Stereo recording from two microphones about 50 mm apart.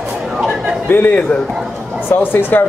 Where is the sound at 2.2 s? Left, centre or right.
Left.